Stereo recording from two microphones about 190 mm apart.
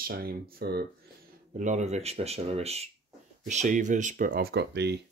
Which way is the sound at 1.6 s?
40° right (ahead or behind).